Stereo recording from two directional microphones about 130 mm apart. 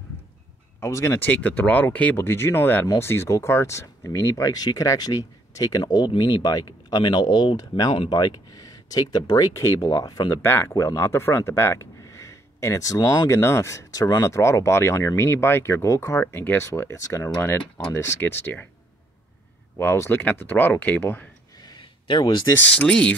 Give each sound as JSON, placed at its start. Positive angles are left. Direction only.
{"t": 0.7, "sound": "speech", "side_deg": 20}
{"t": 10.4, "sound": "speech", "side_deg": 15}
{"t": 19.8, "sound": "speech", "side_deg": 20}
{"t": 21.6, "sound": "a sound", "side_deg": 35}
{"t": 22.7, "sound": "speech", "side_deg": 10}